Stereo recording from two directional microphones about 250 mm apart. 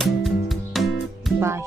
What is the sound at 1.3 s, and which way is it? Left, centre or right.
Speech, centre.